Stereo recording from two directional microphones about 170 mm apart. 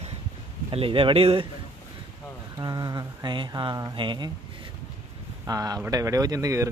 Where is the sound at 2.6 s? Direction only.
25° right (ahead or behind).